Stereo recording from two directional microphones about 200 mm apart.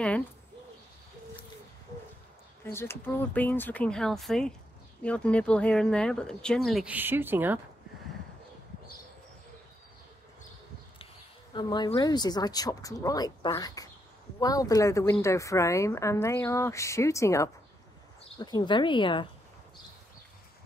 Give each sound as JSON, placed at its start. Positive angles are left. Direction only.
{"t": 2.6, "sound": "speech", "side_deg": 10}
{"t": 11.5, "sound": "speech", "side_deg": 25}